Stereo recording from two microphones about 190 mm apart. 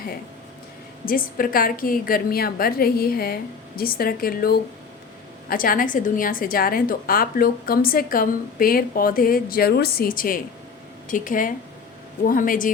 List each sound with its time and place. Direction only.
1.0 s a woman's voice: 50° left (ahead or behind)